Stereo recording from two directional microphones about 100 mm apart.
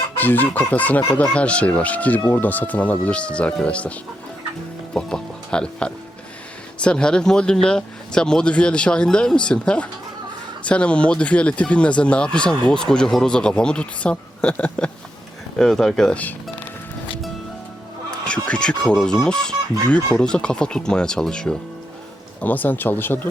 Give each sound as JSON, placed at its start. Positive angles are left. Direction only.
{"t": 0.2, "sound": "speech", "side_deg": 20}
{"t": 4.9, "sound": "speech", "side_deg": 10}
{"t": 18.3, "sound": "speech", "side_deg": 10}